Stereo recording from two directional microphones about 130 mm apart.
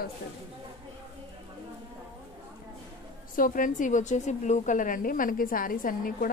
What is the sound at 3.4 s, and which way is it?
A woman's voice, 90° left.